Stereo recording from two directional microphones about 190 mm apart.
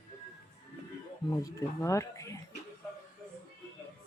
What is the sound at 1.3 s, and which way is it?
Speech, 15° left (ahead or behind).